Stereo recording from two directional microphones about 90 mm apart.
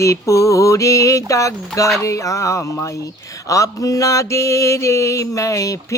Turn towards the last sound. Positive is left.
turn(degrees=35)  # may be behind; listen again after turning